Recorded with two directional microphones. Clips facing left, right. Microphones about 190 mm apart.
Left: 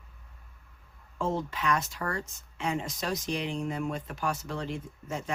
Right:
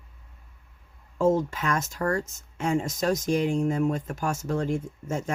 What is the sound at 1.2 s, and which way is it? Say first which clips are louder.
Speech: right 8 dB; 45° right (ahead or behind).